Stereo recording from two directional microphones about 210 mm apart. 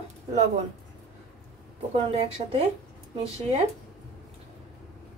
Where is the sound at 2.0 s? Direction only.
30° right (ahead or behind).